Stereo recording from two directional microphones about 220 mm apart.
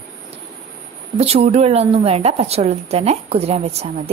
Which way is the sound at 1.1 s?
25° right (ahead or behind).